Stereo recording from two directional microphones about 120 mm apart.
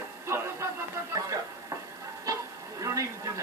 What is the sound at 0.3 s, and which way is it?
Music, 25° right (ahead or behind).